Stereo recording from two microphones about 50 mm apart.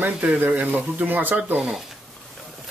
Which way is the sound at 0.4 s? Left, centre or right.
Right.